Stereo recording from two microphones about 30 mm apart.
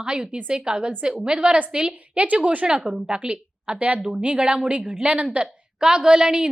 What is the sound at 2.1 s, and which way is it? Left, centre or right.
Speech, right.